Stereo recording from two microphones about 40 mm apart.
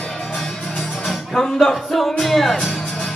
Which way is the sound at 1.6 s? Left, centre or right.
Centre.